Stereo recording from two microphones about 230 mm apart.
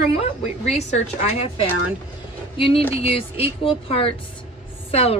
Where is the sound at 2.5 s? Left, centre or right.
Left.